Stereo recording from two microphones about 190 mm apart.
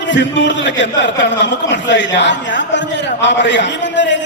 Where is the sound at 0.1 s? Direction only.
70° left (ahead or behind).